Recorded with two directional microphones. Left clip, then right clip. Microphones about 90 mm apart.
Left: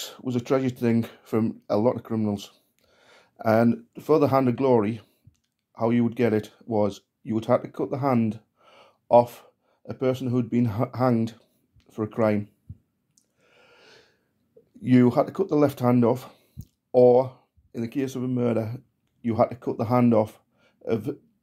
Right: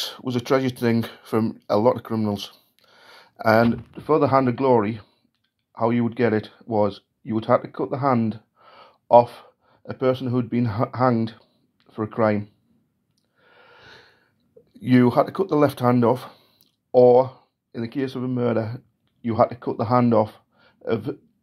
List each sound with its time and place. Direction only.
0.0 s speech: 15° left (ahead or behind)
4.2 s speech: 45° left (ahead or behind)
8.3 s a sound: 35° left (ahead or behind)
9.1 s speech: 30° left (ahead or behind)
13.4 s a sound: 35° left (ahead or behind)
13.8 s gasp: 20° left (ahead or behind)
14.7 s speech: 20° left (ahead or behind)